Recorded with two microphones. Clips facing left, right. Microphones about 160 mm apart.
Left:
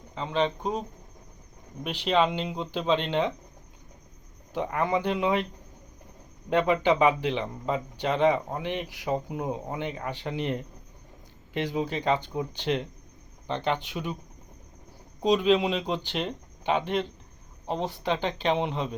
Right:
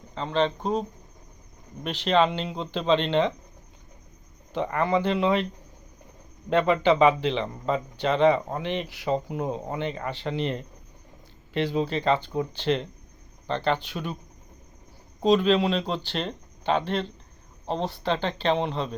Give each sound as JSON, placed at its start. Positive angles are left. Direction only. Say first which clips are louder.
{"t": 0.1, "sound": "speech", "louder": "right 2 dB", "side_deg": 10}
{"t": 4.5, "sound": "speech", "louder": "right 2 dB", "side_deg": 10}
{"t": 6.5, "sound": "speech", "louder": "right 2 dB", "side_deg": 10}
{"t": 15.2, "sound": "speech", "louder": "right 2 dB", "side_deg": 15}